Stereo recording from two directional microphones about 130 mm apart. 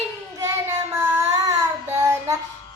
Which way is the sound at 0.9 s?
25° right (ahead or behind).